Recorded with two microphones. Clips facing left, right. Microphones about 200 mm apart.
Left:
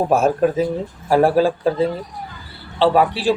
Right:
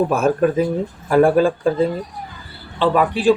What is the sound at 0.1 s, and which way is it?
Speech, 55° right (ahead or behind).